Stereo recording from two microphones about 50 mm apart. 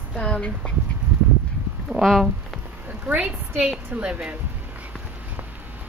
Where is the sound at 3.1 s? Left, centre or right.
Right.